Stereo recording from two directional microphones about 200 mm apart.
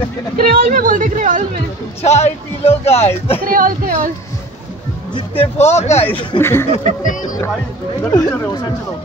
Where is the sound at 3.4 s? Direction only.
45° right (ahead or behind).